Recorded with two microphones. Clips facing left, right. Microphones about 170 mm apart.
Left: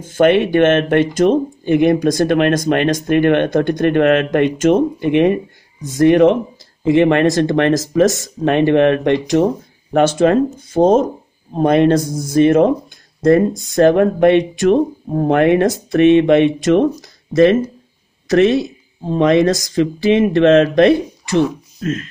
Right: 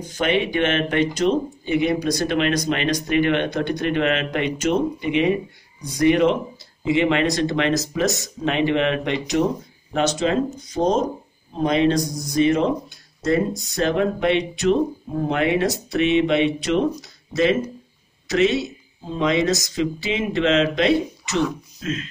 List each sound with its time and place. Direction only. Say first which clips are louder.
0.0 s speech: left 9 dB; 50° left (ahead or behind)
12.0 s speech: left 4 dB; 25° left (ahead or behind)
12.4 s speech: left 7 dB; 55° left (ahead or behind)